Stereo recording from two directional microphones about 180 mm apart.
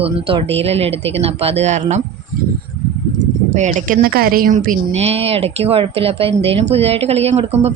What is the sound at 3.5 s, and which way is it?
A woman's voice, 40° right (ahead or behind).